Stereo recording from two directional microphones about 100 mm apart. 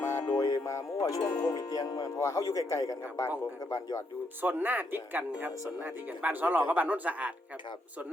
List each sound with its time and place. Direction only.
0.0 s music: 30° left (ahead or behind)
1.0 s speech: 30° left (ahead or behind)
4.4 s speech: 20° right (ahead or behind)